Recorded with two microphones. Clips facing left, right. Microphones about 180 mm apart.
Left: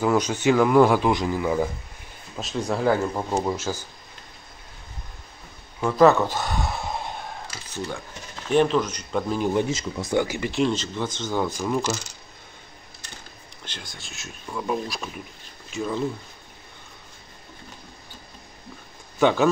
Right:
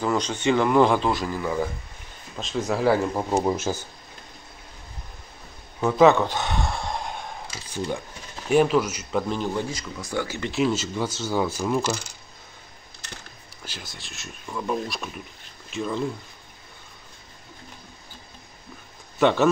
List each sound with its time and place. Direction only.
0.0 s a man's voice: 10° left (ahead or behind)
2.4 s speech: centre (ahead or behind); by 3.8 s 20° right (ahead or behind)
5.8 s a sound: 5° right (ahead or behind)
7.7 s speech: 15° right (ahead or behind)
9.5 s speech: 20° left (ahead or behind)
10.5 s speech: 5° right (ahead or behind)
13.7 s speech: 5° right (ahead or behind)
19.1 s speech: centre (ahead or behind)